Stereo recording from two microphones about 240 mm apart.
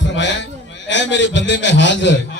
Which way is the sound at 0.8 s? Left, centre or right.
Left.